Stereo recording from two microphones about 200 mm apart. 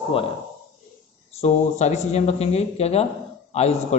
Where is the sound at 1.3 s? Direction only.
35° left (ahead or behind).